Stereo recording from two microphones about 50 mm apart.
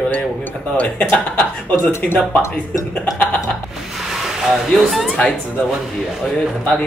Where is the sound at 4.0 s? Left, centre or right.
Centre.